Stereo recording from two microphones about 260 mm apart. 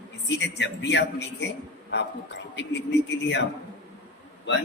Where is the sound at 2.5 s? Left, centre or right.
Left.